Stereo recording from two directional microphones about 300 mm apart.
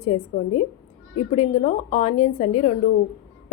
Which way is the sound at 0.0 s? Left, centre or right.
Left.